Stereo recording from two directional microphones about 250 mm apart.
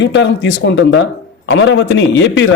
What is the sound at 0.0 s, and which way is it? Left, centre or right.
A man's voice, left.